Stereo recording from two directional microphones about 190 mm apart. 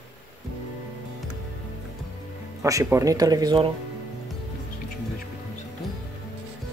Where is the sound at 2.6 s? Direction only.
15° right (ahead or behind).